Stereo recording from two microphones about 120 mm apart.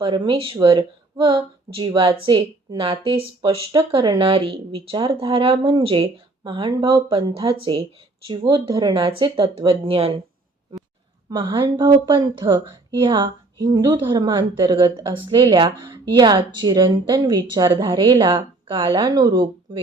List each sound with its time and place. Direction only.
0.0 s speech: 45° right (ahead or behind)
0.8 s speech: 30° right (ahead or behind)
1.7 s speech: 45° right (ahead or behind)
11.3 s a woman's voice: 40° right (ahead or behind)